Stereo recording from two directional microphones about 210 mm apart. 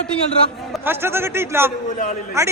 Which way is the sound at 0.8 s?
10° right (ahead or behind).